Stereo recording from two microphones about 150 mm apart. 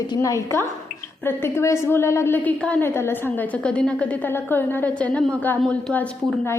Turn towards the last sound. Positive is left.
turn(degrees=10)  # may be behind; listen again after turning